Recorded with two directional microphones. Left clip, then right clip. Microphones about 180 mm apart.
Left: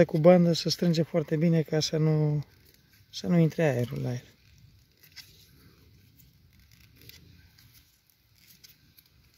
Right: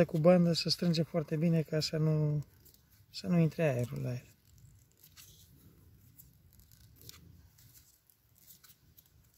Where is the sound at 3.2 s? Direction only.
40° left (ahead or behind).